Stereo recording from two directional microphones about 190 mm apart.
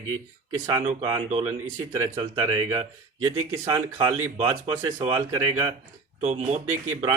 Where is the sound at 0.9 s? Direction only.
30° right (ahead or behind).